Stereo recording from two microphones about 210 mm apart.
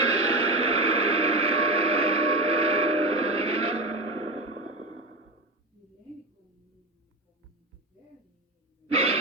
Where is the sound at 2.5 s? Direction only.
30° right (ahead or behind).